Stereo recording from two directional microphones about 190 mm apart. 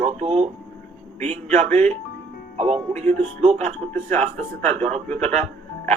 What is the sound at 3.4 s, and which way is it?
Speech, 35° right (ahead or behind).